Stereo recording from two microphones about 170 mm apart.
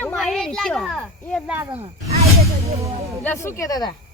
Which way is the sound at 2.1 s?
35° right (ahead or behind).